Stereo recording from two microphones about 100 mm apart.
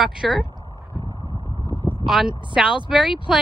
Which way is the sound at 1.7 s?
20° right (ahead or behind).